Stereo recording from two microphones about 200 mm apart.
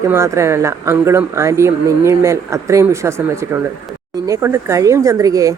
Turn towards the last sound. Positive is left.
turn(degrees=-15)  # may be behind; listen again after turning